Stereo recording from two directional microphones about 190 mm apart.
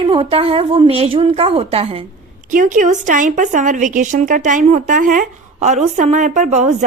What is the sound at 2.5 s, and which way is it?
A woman's voice, 45° right (ahead or behind).